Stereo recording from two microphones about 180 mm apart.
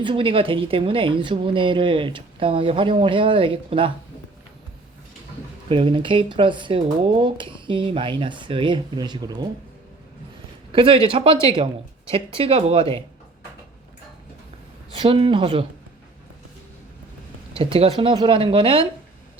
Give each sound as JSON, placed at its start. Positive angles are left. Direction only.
{"t": 0.0, "sound": "speech", "side_deg": -30}
{"t": 5.6, "sound": "speech", "side_deg": -30}
{"t": 10.7, "sound": "speech", "side_deg": -30}
{"t": 14.9, "sound": "speech", "side_deg": -30}
{"t": 17.5, "sound": "speech", "side_deg": -30}